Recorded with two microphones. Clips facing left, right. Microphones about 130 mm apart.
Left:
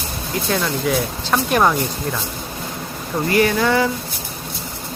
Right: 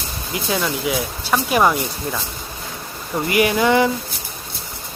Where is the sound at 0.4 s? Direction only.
5° right (ahead or behind).